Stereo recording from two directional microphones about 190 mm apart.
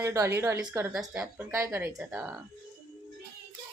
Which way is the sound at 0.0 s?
15° right (ahead or behind).